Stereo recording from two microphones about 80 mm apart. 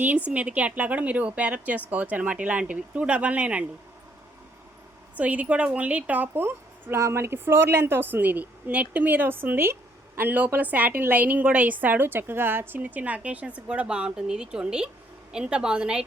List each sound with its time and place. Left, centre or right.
0.3 s a woman's voice: centre
5.1 s a woman's voice: centre